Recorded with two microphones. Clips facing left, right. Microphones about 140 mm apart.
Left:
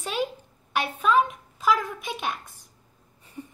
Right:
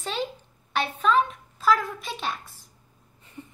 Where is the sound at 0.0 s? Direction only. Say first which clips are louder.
Left 2 dB; 10° left (ahead or behind).